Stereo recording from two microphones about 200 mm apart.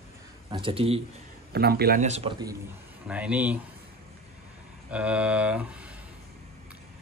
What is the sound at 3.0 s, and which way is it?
Speech, 5° right (ahead or behind).